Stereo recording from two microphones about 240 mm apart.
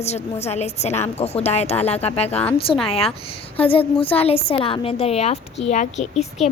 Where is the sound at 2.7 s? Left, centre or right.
Centre.